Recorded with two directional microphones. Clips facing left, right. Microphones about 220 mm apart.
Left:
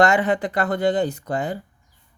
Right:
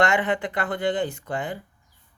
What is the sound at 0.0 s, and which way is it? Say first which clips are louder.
Speech: left 4 dB; 40° left (ahead or behind).